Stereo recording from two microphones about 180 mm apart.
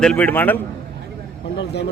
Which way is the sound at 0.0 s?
5° left (ahead or behind).